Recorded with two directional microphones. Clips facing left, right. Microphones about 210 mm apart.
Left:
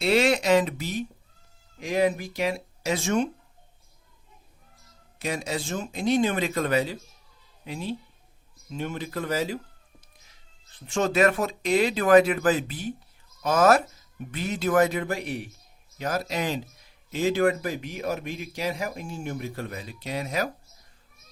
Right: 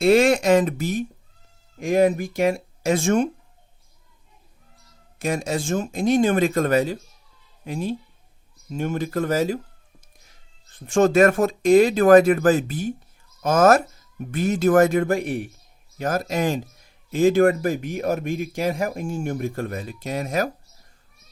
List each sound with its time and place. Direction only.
0.0 s speech: 50° right (ahead or behind)
5.2 s speech: 45° right (ahead or behind)
10.8 s speech: 50° right (ahead or behind)